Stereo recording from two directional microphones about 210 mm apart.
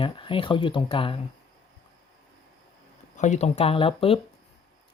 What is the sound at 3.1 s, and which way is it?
Speech, 35° left (ahead or behind).